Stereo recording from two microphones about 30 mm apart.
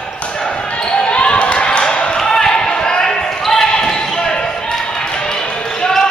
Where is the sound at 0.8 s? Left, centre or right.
Left.